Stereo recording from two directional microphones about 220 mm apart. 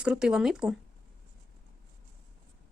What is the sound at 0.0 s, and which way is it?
Speech, 5° right (ahead or behind).